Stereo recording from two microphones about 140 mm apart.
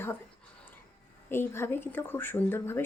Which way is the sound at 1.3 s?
15° left (ahead or behind).